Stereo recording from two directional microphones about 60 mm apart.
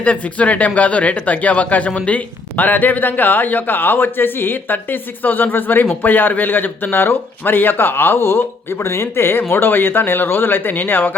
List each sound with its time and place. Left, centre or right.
0.0 s speech: left